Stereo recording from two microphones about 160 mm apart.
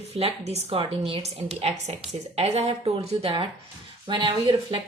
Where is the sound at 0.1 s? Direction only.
40° right (ahead or behind).